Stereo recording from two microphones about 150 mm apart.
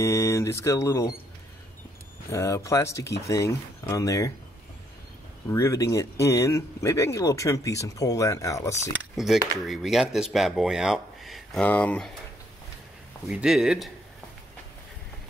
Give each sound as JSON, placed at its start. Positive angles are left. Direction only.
{"t": 0.0, "sound": "speech", "side_deg": 20}
{"t": 2.2, "sound": "speech", "side_deg": 20}
{"t": 5.5, "sound": "speech", "side_deg": 20}
{"t": 8.9, "sound": "speech", "side_deg": 0}
{"t": 13.3, "sound": "speech", "side_deg": -5}